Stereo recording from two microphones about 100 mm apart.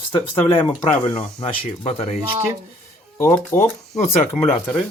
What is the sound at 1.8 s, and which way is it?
Speech, 75° left (ahead or behind).